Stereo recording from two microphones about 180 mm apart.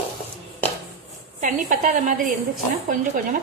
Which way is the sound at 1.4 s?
45° right (ahead or behind).